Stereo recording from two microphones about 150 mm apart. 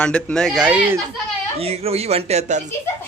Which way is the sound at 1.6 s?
40° right (ahead or behind).